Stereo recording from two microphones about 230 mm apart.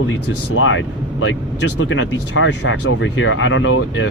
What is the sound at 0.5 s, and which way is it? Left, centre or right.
Speech, left.